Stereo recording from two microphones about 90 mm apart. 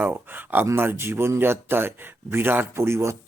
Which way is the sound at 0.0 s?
20° right (ahead or behind).